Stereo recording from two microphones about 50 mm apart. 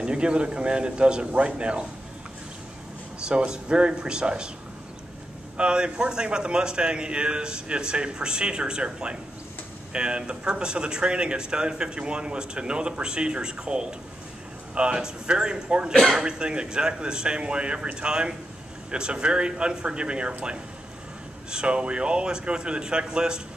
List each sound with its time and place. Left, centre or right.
0.0 s speech: centre
3.3 s a man's voice: centre
5.6 s a man's voice: centre
21.5 s speech: centre